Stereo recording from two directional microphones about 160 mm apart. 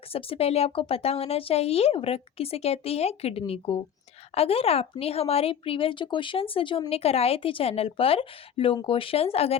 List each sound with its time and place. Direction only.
0.1 s speech: 35° left (ahead or behind)